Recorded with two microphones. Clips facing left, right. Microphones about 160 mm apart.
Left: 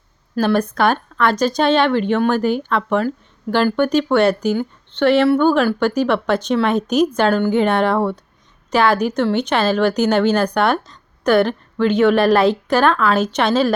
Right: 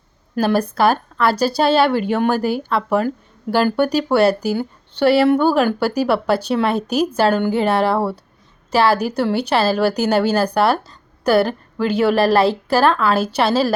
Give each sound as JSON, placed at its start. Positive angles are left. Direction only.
{"t": 0.3, "sound": "speech", "side_deg": -10}
{"t": 12.1, "sound": "a woman's voice", "side_deg": -35}
{"t": 13.1, "sound": "speech", "side_deg": -5}